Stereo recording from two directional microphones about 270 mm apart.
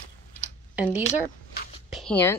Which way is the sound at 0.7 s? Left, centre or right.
Centre.